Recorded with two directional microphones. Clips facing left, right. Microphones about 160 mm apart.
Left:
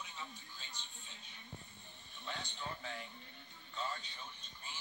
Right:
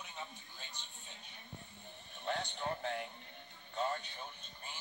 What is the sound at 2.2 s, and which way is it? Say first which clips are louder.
Music: right 7 dB; 60° right (ahead or behind).